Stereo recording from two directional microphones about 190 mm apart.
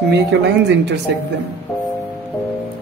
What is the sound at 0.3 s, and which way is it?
Speech, 65° right (ahead or behind).